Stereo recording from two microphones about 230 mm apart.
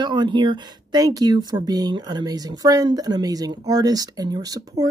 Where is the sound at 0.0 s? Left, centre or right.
Centre.